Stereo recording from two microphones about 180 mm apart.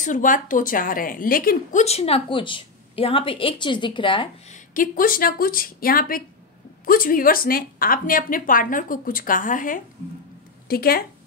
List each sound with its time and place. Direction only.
0.0 s a woman's voice: 45° left (ahead or behind); by 4.3 s 25° left (ahead or behind)
4.5 s speech: 50° left (ahead or behind)